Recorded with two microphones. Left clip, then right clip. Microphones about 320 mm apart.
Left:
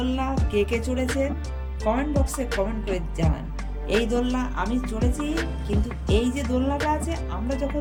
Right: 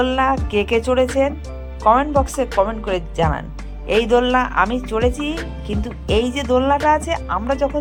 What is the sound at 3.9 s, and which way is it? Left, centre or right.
Speech, centre.